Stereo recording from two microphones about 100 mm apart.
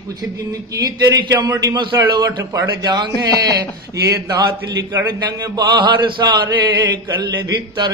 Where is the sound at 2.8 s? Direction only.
45° right (ahead or behind).